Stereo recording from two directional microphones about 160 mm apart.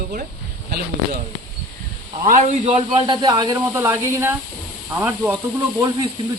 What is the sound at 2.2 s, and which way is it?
Speech, 45° right (ahead or behind).